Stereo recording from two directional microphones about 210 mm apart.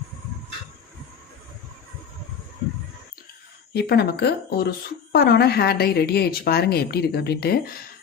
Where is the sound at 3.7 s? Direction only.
50° left (ahead or behind).